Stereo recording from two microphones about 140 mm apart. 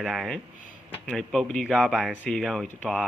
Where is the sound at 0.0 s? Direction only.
Centre (ahead or behind).